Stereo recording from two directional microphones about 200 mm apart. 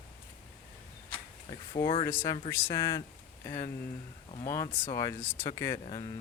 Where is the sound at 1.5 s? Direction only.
25° left (ahead or behind).